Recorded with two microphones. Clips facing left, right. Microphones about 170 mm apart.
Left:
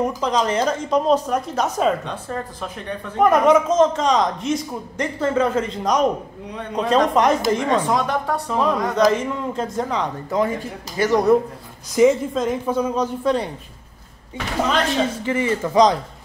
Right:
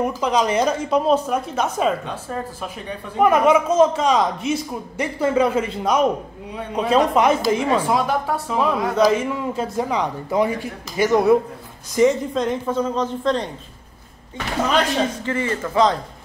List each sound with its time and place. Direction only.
0.0 s a woman's voice: 10° right (ahead or behind); by 13.5 s 10° left (ahead or behind)
15.2 s a woman's voice: 15° left (ahead or behind)